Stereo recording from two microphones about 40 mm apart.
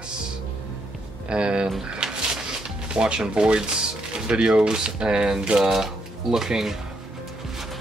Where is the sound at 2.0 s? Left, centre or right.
Centre.